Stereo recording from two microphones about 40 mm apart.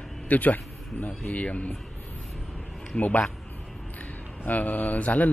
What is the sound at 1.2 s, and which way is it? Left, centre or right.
Speech, left.